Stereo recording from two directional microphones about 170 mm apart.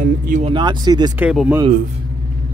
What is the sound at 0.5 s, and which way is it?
Speech, 25° right (ahead or behind).